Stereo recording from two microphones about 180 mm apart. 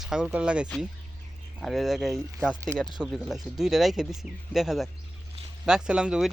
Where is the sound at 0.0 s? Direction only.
5° right (ahead or behind).